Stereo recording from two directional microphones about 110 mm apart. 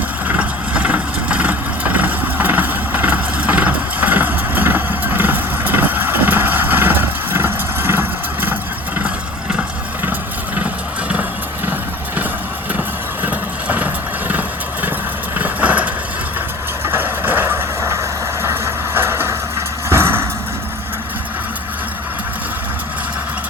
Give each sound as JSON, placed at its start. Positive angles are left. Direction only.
{"t": 0.3, "sound": "vehicle", "side_deg": -10}
{"t": 9.0, "sound": "a sound", "side_deg": -10}
{"t": 10.1, "sound": "vehicle", "side_deg": -15}
{"t": 13.2, "sound": "vehicle", "side_deg": -15}